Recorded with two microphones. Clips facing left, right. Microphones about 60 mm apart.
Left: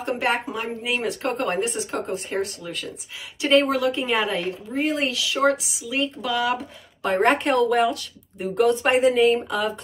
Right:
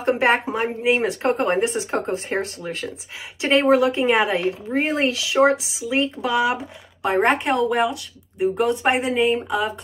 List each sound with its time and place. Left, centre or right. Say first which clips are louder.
0.0 s speech: right 5 dB; right
6.3 s speech: right 3 dB; centre
7.2 s speech: left 2 dB; centre